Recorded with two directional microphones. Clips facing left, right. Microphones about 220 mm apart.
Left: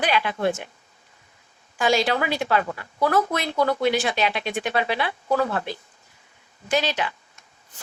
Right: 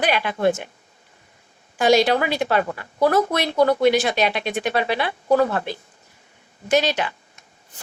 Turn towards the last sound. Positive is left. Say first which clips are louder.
# right 4 dB
turn(degrees=-45)  # may be behind; listen again after turning